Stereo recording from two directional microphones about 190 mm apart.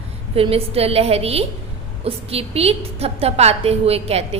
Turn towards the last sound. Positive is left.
turn(degrees=-30)  # may be behind; listen again after turning